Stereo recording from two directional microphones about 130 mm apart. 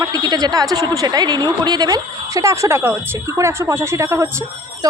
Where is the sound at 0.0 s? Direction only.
30° right (ahead or behind).